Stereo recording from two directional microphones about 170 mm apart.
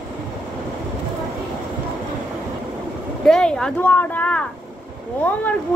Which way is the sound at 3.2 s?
5° left (ahead or behind).